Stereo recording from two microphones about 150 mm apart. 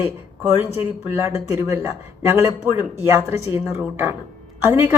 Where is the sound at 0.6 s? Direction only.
15° right (ahead or behind).